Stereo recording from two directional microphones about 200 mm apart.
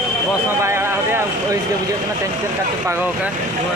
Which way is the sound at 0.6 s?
15° right (ahead or behind).